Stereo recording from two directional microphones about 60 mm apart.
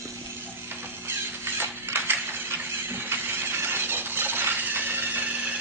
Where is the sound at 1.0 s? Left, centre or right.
Right.